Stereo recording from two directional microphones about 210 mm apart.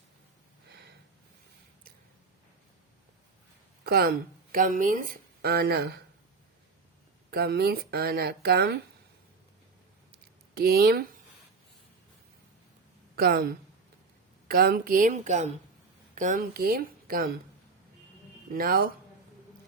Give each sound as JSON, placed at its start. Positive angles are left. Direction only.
{"t": 0.7, "sound": "a sound", "side_deg": -50}
{"t": 3.8, "sound": "speech", "side_deg": -45}
{"t": 7.3, "sound": "speech", "side_deg": -50}
{"t": 10.5, "sound": "speech", "side_deg": -45}
{"t": 13.1, "sound": "a woman's voice", "side_deg": -45}
{"t": 18.5, "sound": "speech", "side_deg": -45}